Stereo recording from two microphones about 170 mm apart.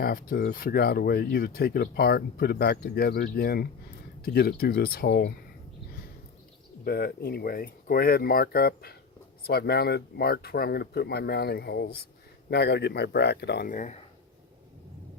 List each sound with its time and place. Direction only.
0.0 s speech: 60° left (ahead or behind)
6.8 s speech: 60° left (ahead or behind)
13.7 s speech: 50° left (ahead or behind)